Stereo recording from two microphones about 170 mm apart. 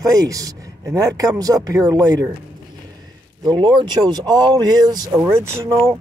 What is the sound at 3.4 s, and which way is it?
Speech, 25° right (ahead or behind).